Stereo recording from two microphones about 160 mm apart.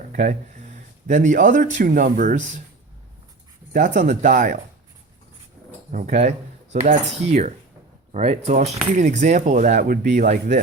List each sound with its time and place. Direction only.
0.1 s speech: 55° right (ahead or behind)
3.7 s speech: 55° right (ahead or behind)
5.9 s speech: 50° right (ahead or behind)